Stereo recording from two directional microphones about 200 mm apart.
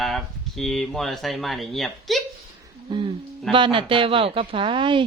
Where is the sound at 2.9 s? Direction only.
25° right (ahead or behind).